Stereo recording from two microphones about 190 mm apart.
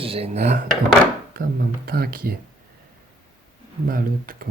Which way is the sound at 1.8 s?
50° right (ahead or behind).